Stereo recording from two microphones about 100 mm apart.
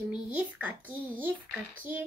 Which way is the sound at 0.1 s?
15° right (ahead or behind).